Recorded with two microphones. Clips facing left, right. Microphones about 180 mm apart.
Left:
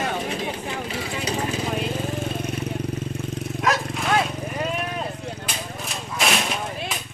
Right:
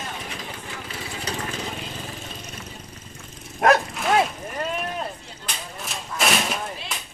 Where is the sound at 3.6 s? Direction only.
55° right (ahead or behind).